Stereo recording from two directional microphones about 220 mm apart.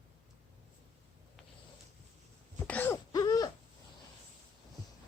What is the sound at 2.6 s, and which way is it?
Wail, 5° left (ahead or behind).